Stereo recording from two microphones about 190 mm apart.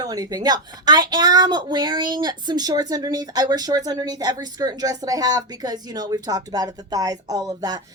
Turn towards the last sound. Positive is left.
turn(degrees=-20)  # may be behind; listen again after turning